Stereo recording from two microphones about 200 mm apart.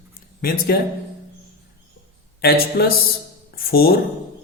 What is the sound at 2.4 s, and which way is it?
A man's voice, 50° left (ahead or behind).